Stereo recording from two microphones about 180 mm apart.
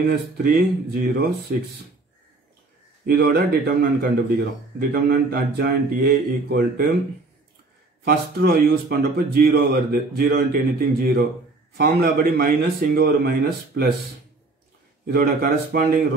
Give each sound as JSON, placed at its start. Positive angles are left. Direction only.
{"t": 0.1, "sound": "speech", "side_deg": -60}
{"t": 3.1, "sound": "speech", "side_deg": -60}
{"t": 8.0, "sound": "speech", "side_deg": -60}
{"t": 15.0, "sound": "speech", "side_deg": -55}